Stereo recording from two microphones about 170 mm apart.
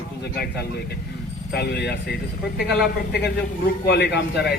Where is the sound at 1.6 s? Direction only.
75° left (ahead or behind).